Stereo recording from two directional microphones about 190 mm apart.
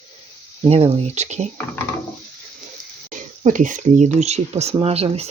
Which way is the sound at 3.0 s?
45° right (ahead or behind).